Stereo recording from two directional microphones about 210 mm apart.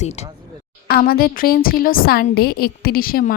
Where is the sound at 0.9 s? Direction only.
45° left (ahead or behind).